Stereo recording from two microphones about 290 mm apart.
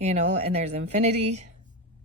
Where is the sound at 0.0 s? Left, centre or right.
Right.